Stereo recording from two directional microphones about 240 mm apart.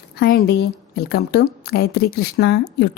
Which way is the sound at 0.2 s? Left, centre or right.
Left.